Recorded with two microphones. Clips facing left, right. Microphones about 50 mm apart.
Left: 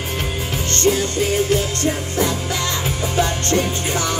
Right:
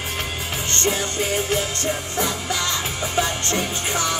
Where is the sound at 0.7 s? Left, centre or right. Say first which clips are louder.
Left 5 dB; right.